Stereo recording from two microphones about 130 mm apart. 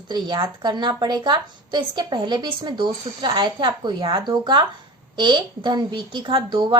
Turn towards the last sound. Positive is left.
turn(degrees=-35)  # may be behind; listen again after turning